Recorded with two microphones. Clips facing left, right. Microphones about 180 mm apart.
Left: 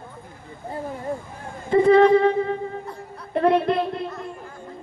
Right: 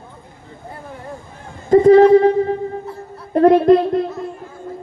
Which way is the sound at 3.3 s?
40° right (ahead or behind).